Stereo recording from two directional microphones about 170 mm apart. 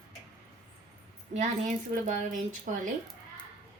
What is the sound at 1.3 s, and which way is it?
A woman's voice, 45° right (ahead or behind).